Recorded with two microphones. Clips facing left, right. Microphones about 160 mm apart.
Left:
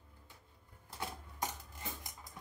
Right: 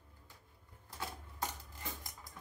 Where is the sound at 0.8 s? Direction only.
20° left (ahead or behind).